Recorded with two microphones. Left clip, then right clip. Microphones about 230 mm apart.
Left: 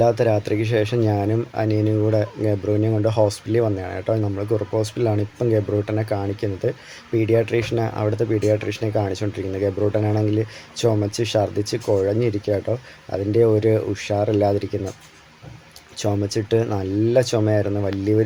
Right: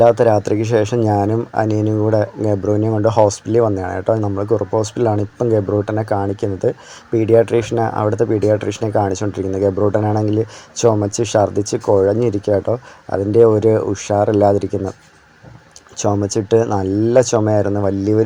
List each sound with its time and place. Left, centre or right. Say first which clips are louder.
0.0 s speech: right 7 dB; centre
16.0 s speech: right 5 dB; centre